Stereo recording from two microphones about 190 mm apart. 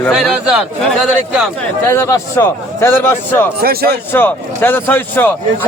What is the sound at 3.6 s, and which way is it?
Speech, 55° right (ahead or behind).